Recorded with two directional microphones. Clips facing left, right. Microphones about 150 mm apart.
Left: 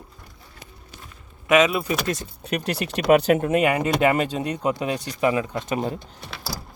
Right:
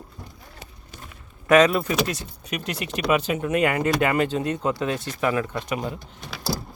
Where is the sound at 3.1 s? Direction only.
45° left (ahead or behind).